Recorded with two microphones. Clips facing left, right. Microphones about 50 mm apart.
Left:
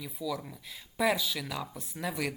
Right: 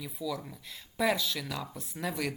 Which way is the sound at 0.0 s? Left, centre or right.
Centre.